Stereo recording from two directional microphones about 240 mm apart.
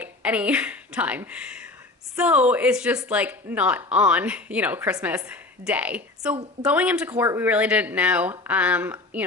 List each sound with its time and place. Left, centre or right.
0.0 s speech: centre
6.3 s a woman's voice: right
6.7 s speech: centre